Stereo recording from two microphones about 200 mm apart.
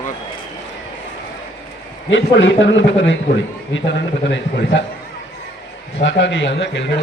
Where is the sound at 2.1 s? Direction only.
70° left (ahead or behind).